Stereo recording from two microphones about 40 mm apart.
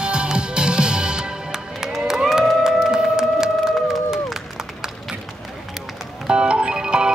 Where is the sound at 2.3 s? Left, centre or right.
Centre.